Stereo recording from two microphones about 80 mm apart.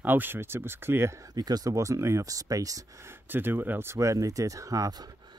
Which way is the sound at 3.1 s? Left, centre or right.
Right.